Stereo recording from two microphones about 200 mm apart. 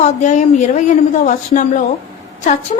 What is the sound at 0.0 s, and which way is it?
A woman's voice, 35° left (ahead or behind).